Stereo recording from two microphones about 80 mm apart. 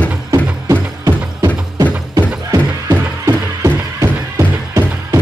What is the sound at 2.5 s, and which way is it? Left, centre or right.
Music, right.